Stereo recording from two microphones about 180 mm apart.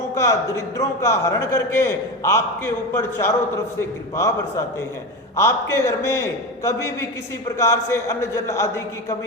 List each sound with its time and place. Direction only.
0.1 s a man's voice: 15° left (ahead or behind)